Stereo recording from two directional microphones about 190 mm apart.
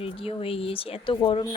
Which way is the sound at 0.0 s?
30° left (ahead or behind).